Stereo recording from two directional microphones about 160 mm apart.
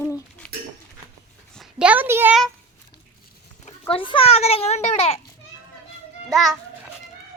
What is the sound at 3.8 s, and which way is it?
A child's voice, 35° left (ahead or behind).